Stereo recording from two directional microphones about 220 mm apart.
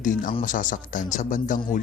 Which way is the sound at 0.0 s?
35° left (ahead or behind).